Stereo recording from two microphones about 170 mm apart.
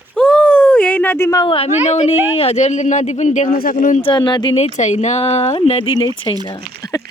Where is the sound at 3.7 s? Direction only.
45° left (ahead or behind).